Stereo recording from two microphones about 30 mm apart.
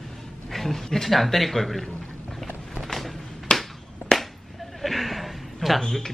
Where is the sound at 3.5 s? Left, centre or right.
Left.